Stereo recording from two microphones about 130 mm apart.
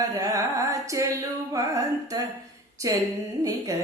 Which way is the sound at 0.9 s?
25° right (ahead or behind).